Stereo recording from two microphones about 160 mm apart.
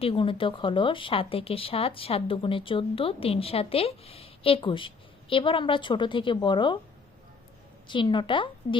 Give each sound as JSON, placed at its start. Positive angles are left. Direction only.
{"t": 0.0, "sound": "speech", "side_deg": 35}
{"t": 7.9, "sound": "speech", "side_deg": 30}